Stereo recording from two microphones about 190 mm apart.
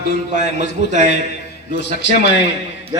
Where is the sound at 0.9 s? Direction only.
40° right (ahead or behind).